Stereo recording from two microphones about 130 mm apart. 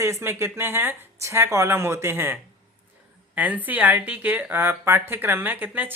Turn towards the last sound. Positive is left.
turn(degrees=-15)  # may be behind; listen again after turning